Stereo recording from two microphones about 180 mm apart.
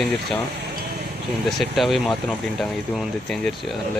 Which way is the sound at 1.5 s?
Centre (ahead or behind).